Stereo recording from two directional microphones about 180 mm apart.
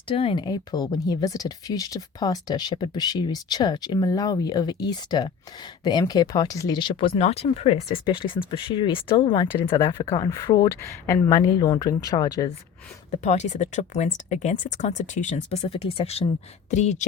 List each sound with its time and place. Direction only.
0.1 s speech: 30° left (ahead or behind)
13.1 s speech: 40° left (ahead or behind)